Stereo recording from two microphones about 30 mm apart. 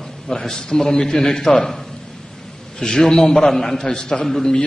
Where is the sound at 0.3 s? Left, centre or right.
Left.